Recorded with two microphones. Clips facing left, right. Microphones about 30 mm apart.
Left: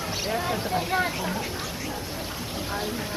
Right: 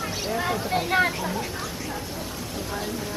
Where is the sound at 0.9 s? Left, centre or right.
Right.